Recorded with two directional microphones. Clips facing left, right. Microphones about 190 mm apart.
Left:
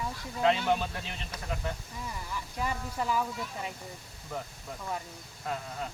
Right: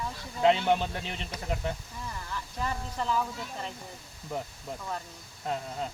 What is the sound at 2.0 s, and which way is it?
Speech, 10° left (ahead or behind).